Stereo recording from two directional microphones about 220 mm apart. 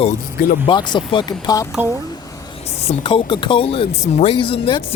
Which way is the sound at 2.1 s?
15° left (ahead or behind).